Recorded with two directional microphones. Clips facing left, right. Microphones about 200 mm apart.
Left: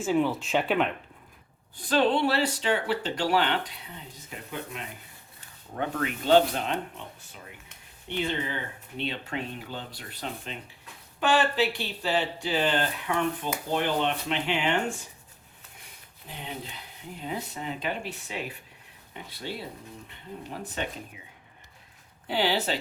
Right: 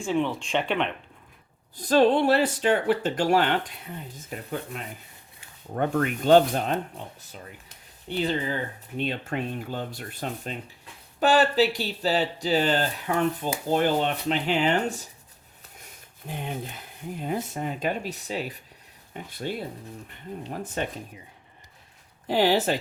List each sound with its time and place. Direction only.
0.0 s speech: 5° left (ahead or behind)
1.7 s speech: 40° right (ahead or behind)
5.7 s speech: 50° right (ahead or behind)
7.7 s a sound: 35° right (ahead or behind)
9.0 s speech: 45° right (ahead or behind)
19.1 s speech: 50° right (ahead or behind)
22.3 s speech: 45° right (ahead or behind)